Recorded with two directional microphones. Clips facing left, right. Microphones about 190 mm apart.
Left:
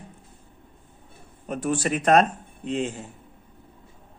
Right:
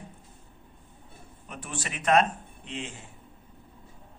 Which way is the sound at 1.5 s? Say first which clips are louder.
Left 13 dB; 40° left (ahead or behind).